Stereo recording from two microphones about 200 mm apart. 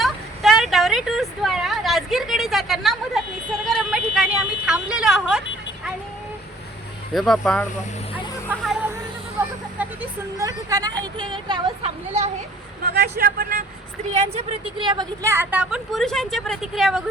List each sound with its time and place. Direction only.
0.0 s vehicle: centre (ahead or behind)
3.8 s a sound: 5° right (ahead or behind)
7.1 s speech: centre (ahead or behind)
8.4 s chatter: 5° right (ahead or behind)
9.7 s a woman's voice: 10° right (ahead or behind); by 12.3 s 30° right (ahead or behind)
12.9 s speech: 55° right (ahead or behind)
14.1 s a woman's voice: 30° right (ahead or behind); by 17.0 s centre (ahead or behind)